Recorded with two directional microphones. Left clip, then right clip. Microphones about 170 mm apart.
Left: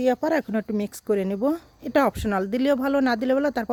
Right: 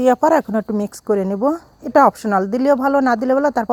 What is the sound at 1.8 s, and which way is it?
Speech, 15° left (ahead or behind).